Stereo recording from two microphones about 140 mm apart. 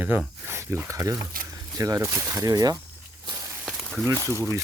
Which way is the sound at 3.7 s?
Centre (ahead or behind).